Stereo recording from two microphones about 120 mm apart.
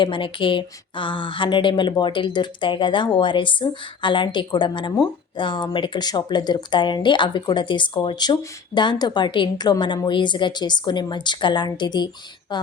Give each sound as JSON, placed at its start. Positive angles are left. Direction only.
{"t": 0.0, "sound": "speech", "side_deg": 45}